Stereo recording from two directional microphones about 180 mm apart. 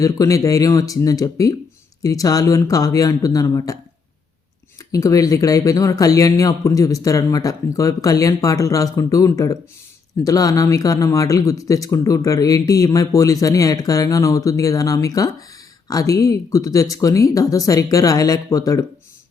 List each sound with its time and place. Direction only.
0.0 s speech: 20° left (ahead or behind)
4.9 s speech: 20° left (ahead or behind)